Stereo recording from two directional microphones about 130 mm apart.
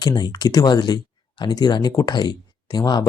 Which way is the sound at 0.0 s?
30° left (ahead or behind).